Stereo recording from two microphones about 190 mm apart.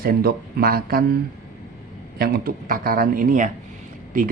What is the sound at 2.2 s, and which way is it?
Speech, 55° right (ahead or behind).